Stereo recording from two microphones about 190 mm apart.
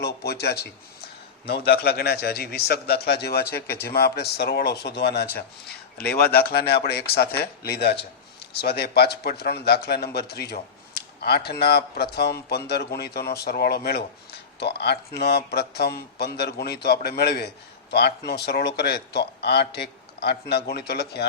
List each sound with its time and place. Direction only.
0.0 s a man's voice: 60° left (ahead or behind)
6.3 s a man's voice: 55° left (ahead or behind)